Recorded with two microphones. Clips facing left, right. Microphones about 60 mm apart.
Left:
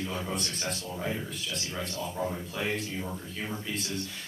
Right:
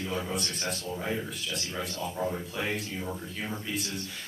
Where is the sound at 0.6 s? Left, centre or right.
Centre.